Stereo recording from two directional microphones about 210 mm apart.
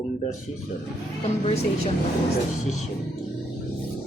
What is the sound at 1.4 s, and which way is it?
Speech, 30° left (ahead or behind).